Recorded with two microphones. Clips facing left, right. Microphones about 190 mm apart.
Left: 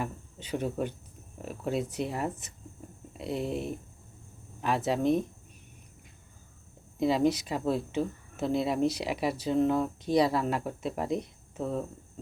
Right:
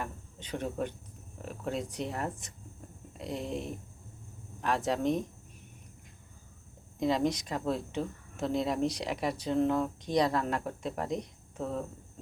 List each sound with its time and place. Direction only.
0.0 s speech: 5° left (ahead or behind)
7.0 s speech: 5° left (ahead or behind)